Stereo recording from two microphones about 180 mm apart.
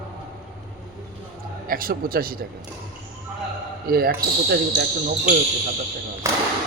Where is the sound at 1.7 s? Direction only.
55° right (ahead or behind).